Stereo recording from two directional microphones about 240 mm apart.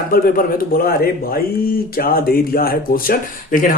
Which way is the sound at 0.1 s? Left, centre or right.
Left.